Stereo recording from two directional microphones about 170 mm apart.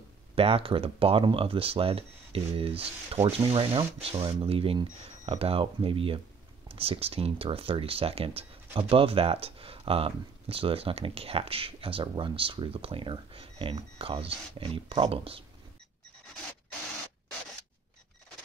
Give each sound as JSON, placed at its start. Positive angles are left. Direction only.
{"t": 0.4, "sound": "speech", "side_deg": -35}